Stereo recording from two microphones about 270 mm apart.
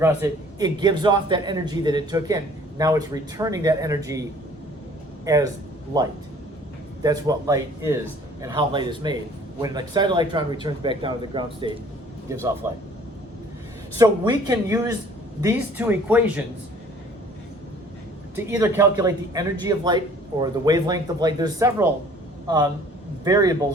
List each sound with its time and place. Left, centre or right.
0.0 s speech: centre
14.0 s speech: centre
18.3 s speech: centre